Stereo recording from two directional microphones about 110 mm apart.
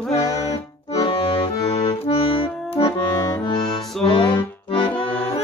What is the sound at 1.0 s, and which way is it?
Accordion, 50° left (ahead or behind).